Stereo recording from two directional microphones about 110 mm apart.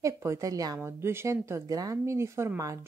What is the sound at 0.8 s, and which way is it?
Speech, 25° right (ahead or behind).